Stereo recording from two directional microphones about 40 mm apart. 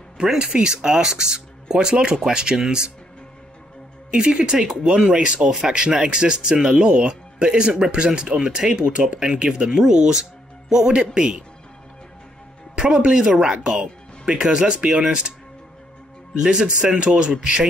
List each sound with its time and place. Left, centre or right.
0.4 s speech: right
4.1 s speech: right
9.2 s speech: centre
12.7 s speech: right
16.3 s speech: centre